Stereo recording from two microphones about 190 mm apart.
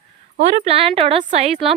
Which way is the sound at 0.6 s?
30° right (ahead or behind).